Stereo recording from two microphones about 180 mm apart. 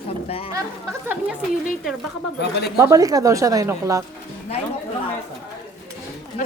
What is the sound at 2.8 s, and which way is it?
A woman's voice, 20° right (ahead or behind).